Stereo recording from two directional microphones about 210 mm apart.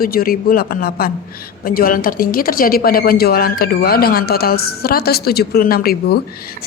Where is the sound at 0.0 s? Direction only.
45° left (ahead or behind).